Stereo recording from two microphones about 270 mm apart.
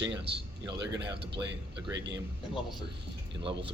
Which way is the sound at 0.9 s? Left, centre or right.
Right.